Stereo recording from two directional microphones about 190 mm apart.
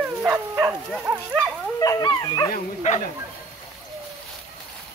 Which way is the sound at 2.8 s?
35° left (ahead or behind).